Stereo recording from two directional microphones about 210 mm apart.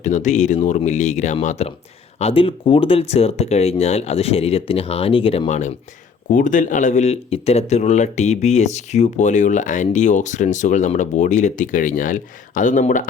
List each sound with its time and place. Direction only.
0.0 s speech: 35° left (ahead or behind)